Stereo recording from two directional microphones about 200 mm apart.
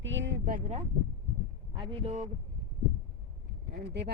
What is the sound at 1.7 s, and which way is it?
Speech, 25° right (ahead or behind).